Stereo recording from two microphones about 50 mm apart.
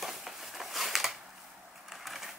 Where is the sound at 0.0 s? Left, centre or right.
Centre.